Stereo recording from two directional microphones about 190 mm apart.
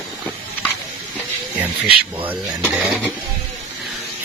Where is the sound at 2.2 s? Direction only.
10° right (ahead or behind).